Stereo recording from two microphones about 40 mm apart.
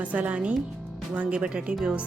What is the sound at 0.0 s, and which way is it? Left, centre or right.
Speech, right.